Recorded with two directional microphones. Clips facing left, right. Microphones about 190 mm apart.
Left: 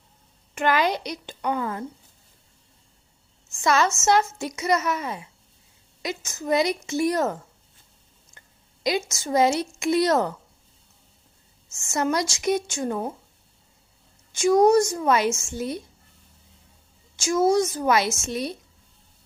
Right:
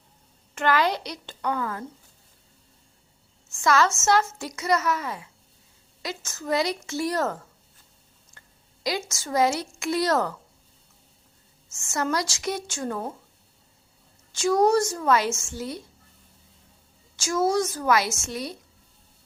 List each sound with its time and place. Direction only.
0.5 s speech: 15° left (ahead or behind)
3.6 s a woman's voice: 20° left (ahead or behind)
8.4 s a woman's voice: 20° left (ahead or behind)
11.7 s speech: 15° left (ahead or behind)
14.3 s speech: 20° left (ahead or behind)
17.2 s a woman's voice: 20° left (ahead or behind)